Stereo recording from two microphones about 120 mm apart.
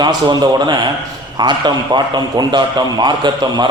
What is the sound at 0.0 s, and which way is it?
A man's voice, 35° right (ahead or behind).